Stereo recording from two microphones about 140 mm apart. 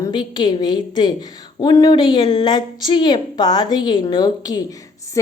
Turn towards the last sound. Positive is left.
turn(degrees=25)  # may be behind; listen again after turning